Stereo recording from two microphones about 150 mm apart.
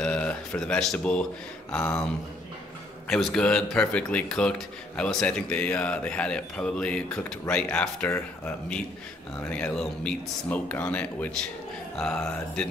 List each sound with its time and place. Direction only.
0.0 s a sound: 10° left (ahead or behind)
1.7 s a man's voice: 5° left (ahead or behind)
3.1 s a man's voice: centre (ahead or behind)